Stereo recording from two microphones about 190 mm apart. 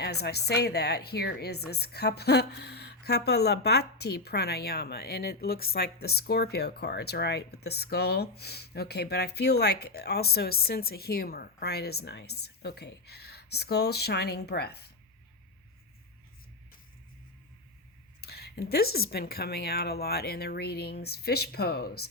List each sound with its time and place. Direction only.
0.0 s a woman's voice: 60° left (ahead or behind)
18.2 s a woman's voice: 60° left (ahead or behind)